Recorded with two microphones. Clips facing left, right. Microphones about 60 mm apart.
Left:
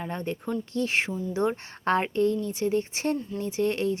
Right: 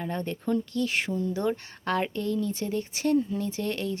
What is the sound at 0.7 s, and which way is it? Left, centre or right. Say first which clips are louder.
Speech: left 1 dB; left.